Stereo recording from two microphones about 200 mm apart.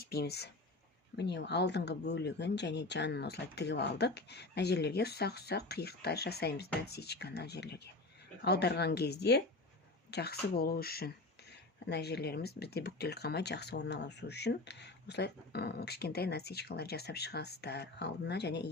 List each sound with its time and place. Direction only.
0.0 s speech: 50° left (ahead or behind)